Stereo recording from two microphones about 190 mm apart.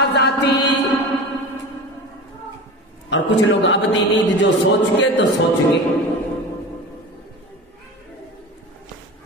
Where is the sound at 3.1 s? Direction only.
75° left (ahead or behind).